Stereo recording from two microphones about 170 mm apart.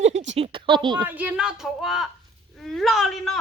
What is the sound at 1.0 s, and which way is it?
Speech, 10° right (ahead or behind).